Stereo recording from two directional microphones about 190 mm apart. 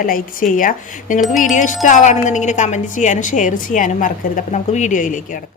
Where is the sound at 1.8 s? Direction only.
40° left (ahead or behind).